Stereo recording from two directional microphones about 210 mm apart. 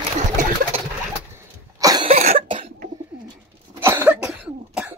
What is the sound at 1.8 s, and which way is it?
Cough, 20° right (ahead or behind).